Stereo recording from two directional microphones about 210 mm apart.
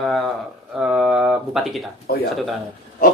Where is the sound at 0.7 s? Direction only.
5° right (ahead or behind).